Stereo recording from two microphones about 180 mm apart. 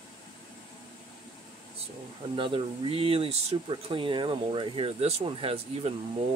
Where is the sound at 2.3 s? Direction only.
30° right (ahead or behind).